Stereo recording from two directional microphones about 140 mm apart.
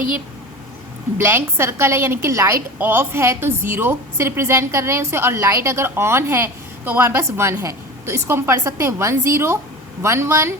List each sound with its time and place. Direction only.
1.2 s a woman's voice: 15° right (ahead or behind)